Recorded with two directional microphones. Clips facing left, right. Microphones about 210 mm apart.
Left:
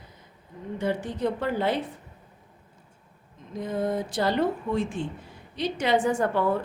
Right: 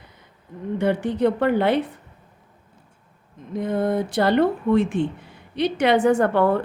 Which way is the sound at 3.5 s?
60° right (ahead or behind).